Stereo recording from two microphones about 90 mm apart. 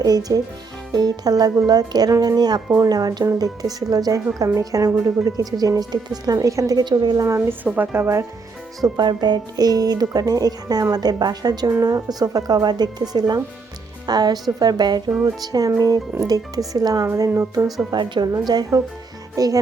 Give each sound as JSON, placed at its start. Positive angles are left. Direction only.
{"t": 0.0, "sound": "speech", "side_deg": -45}
{"t": 7.3, "sound": "speech", "side_deg": -25}
{"t": 8.8, "sound": "speech", "side_deg": -55}
{"t": 17.9, "sound": "a woman's voice", "side_deg": -55}
{"t": 18.4, "sound": "speech", "side_deg": -45}